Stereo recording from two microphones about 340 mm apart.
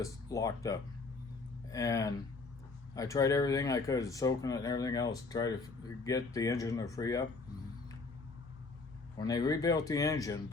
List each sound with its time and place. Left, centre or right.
0.0 s speech: centre
9.1 s speech: centre